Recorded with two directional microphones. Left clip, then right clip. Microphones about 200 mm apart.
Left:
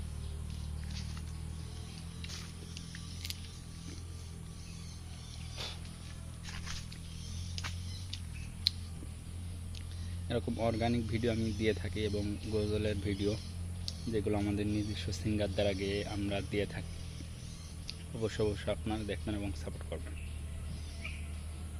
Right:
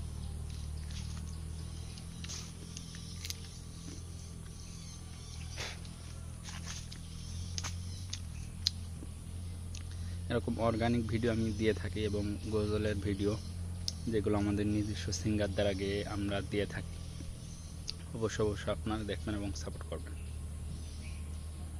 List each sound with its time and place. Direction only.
10.2 s speech: 5° right (ahead or behind)
17.8 s speech: centre (ahead or behind)